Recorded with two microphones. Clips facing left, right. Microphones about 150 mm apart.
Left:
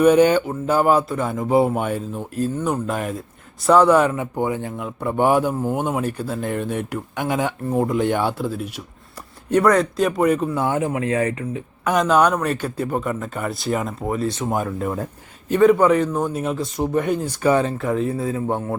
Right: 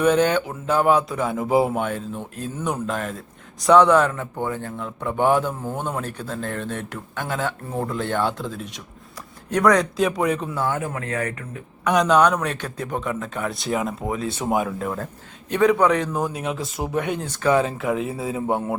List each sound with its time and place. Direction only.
0.0 s speech: 10° left (ahead or behind)
10.6 s speech: 20° left (ahead or behind)
11.9 s speech: centre (ahead or behind)
17.6 s speech: centre (ahead or behind)